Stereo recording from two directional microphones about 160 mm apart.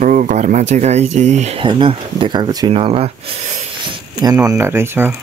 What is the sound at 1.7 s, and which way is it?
Speech, 30° right (ahead or behind).